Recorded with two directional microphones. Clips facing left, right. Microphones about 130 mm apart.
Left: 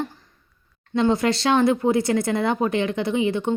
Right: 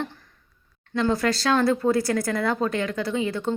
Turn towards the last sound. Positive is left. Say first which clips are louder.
# left 4 dB
turn(degrees=20)  # may be behind; listen again after turning